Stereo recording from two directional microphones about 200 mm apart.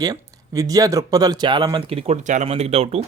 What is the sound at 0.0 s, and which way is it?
Speech, 20° right (ahead or behind).